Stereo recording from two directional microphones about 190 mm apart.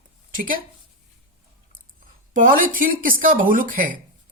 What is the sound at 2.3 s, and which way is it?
A woman's voice, 45° right (ahead or behind).